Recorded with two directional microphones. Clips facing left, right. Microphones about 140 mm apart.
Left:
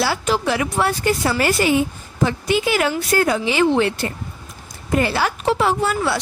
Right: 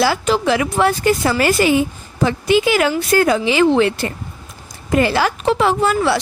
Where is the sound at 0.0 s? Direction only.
90° right.